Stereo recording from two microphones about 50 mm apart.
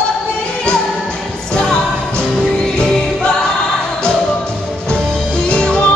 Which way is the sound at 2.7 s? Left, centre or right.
Centre.